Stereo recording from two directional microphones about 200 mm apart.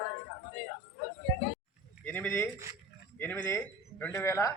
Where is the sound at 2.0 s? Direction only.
5° left (ahead or behind).